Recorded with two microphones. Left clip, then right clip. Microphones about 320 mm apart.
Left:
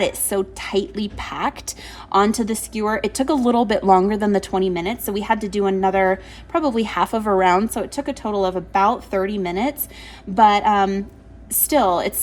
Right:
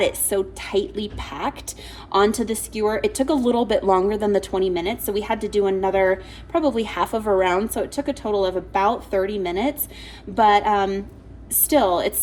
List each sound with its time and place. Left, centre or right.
0.3 s speech: left